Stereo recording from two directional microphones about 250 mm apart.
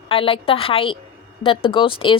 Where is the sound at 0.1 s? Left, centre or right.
Left.